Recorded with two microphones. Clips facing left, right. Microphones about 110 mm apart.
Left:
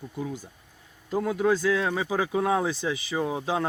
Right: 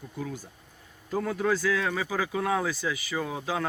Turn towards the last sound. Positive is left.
turn(degrees=20)  # may be behind; listen again after turning